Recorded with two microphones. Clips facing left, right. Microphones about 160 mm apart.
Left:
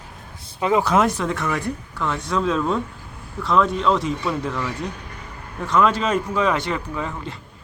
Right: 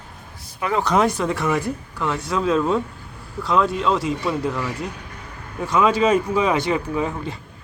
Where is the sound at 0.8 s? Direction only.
Centre (ahead or behind).